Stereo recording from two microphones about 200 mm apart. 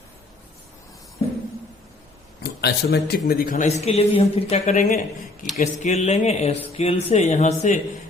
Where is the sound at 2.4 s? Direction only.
55° left (ahead or behind).